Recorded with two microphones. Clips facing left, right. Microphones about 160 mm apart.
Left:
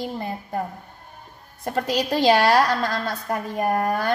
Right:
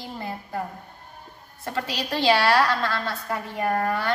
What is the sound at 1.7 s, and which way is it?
A woman's voice, 45° left (ahead or behind).